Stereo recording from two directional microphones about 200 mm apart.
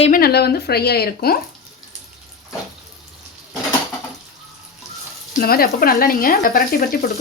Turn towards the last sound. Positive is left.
turn(degrees=45)  # may be behind; listen again after turning